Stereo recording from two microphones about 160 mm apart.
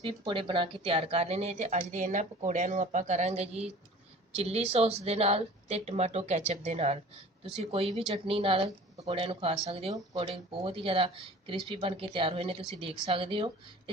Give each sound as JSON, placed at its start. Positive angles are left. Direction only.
{"t": 0.0, "sound": "speech", "side_deg": -35}